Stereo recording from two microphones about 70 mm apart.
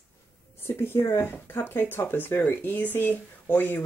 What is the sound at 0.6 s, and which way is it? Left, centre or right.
Speech, left.